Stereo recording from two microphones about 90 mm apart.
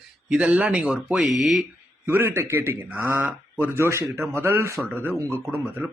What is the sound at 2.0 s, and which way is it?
Speech, 25° right (ahead or behind).